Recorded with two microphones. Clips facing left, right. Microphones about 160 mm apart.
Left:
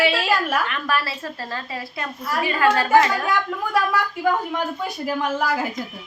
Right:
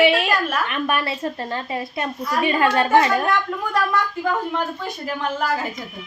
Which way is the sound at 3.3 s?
10° left (ahead or behind).